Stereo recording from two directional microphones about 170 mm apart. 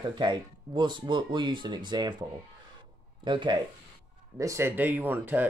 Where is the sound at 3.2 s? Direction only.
30° right (ahead or behind).